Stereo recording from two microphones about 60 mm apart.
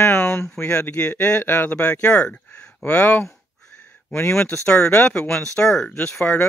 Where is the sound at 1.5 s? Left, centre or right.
Left.